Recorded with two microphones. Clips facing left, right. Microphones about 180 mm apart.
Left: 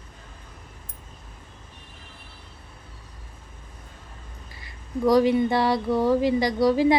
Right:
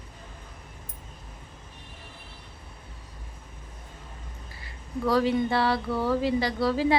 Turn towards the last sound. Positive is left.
turn(degrees=15)  # may be behind; listen again after turning